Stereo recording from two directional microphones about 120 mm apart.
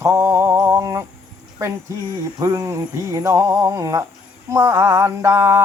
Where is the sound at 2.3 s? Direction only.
30° right (ahead or behind).